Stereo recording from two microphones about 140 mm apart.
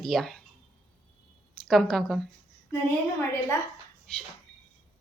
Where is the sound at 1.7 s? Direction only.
5° left (ahead or behind).